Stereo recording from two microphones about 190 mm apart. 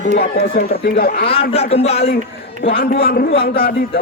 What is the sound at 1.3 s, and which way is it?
Speech, 30° left (ahead or behind).